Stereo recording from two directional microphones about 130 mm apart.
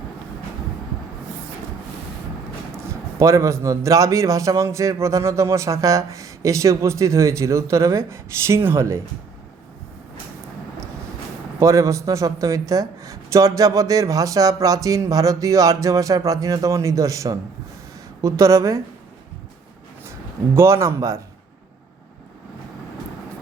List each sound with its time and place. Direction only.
2.7 s a man's voice: 20° right (ahead or behind)
11.6 s a man's voice: 25° right (ahead or behind)
20.1 s a man's voice: 20° right (ahead or behind)